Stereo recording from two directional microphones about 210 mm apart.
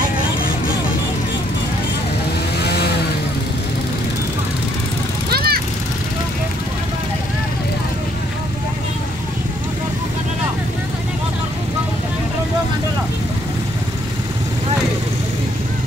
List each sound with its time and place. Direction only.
2.6 s vehicle: 50° left (ahead or behind)
5.3 s vehicle: 50° right (ahead or behind)